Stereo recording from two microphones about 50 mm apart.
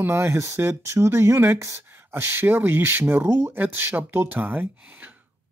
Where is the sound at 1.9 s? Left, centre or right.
Right.